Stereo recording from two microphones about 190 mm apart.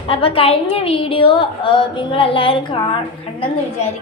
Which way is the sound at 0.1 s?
30° left (ahead or behind).